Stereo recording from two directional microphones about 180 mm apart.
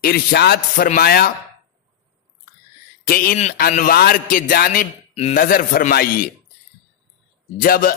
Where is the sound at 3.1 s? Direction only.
55° left (ahead or behind).